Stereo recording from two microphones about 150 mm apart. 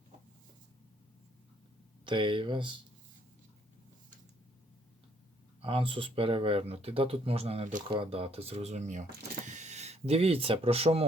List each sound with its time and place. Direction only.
2.0 s speech: 35° right (ahead or behind)
5.6 s speech: 35° right (ahead or behind)